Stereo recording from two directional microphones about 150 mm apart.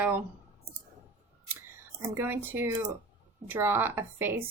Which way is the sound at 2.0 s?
15° right (ahead or behind).